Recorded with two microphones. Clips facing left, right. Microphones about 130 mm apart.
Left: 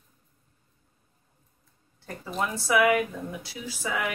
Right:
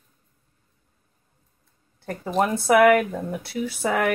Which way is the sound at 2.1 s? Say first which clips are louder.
Right 8 dB; 55° right (ahead or behind).